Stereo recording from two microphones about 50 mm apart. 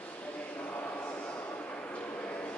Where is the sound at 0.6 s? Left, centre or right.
Left.